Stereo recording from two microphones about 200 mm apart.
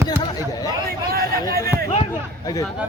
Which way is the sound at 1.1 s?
50° right (ahead or behind).